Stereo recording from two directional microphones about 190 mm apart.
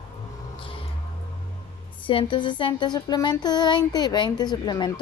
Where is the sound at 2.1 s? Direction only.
25° left (ahead or behind).